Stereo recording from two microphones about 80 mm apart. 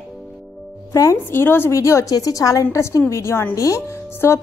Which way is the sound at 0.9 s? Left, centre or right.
Left.